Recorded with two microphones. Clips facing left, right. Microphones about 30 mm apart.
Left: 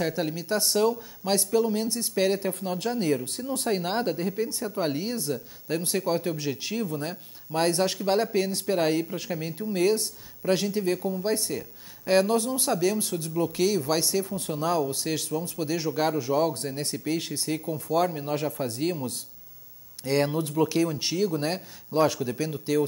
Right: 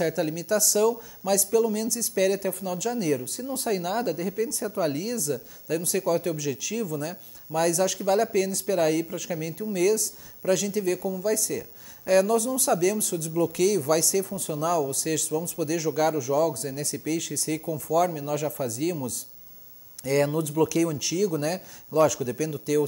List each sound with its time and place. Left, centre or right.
0.0 s speech: left
4.4 s speech: left
20.0 s speech: left
21.5 s speech: left